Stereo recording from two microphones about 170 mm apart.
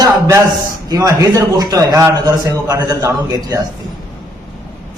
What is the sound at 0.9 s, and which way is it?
A man's voice, 20° right (ahead or behind).